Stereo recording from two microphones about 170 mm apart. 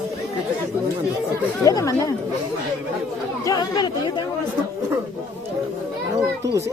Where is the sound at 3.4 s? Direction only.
20° left (ahead or behind).